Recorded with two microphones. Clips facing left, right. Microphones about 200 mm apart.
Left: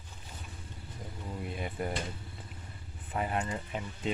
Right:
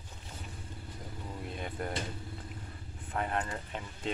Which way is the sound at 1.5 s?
5° left (ahead or behind).